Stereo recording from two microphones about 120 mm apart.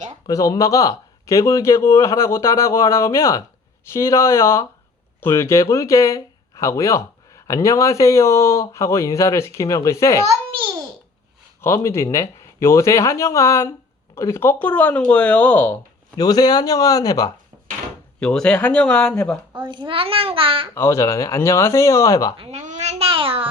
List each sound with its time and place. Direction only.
0.3 s speech: 30° left (ahead or behind)
11.6 s speech: 25° left (ahead or behind)
16.1 s speech: 30° left (ahead or behind)
18.2 s speech: 5° left (ahead or behind)
19.5 s a child's voice: 40° right (ahead or behind)
20.7 s speech: 20° left (ahead or behind)
22.4 s babbling: 65° right (ahead or behind)
23.0 s babbling: 50° right (ahead or behind)